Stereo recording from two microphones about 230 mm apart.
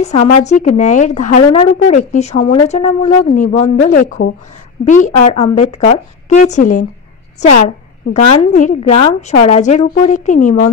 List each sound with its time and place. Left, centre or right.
0.0 s a woman's voice: left